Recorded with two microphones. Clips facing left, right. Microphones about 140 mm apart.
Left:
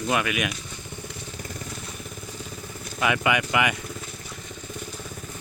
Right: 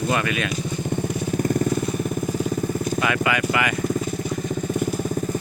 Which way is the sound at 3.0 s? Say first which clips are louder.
Left 2 dB; 20° left (ahead or behind).